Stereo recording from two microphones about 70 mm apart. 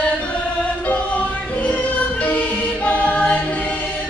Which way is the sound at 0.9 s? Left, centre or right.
Centre.